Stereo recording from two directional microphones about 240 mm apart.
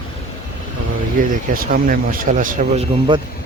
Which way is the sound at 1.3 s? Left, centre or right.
Right.